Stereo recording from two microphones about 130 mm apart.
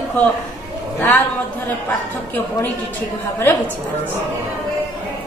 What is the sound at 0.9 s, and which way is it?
Speech, 15° left (ahead or behind).